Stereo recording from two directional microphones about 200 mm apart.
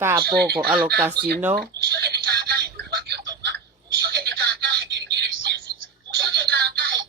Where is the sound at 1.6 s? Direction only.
55° right (ahead or behind).